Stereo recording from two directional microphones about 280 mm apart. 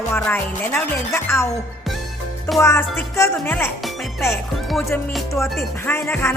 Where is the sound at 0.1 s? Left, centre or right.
Centre.